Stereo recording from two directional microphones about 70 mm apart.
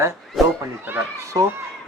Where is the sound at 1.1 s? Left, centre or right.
Right.